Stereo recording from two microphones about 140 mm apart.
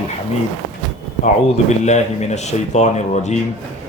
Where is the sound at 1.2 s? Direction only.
55° left (ahead or behind).